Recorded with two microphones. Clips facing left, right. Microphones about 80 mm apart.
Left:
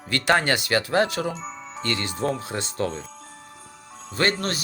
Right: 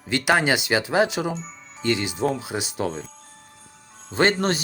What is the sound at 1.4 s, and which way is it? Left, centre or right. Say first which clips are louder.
Music: left 5 dB; left.